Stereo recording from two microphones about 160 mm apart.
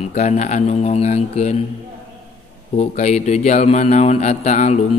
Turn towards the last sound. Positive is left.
turn(degrees=50)  # may be behind; listen again after turning